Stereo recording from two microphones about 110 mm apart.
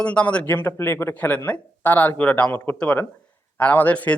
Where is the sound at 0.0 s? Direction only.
10° left (ahead or behind).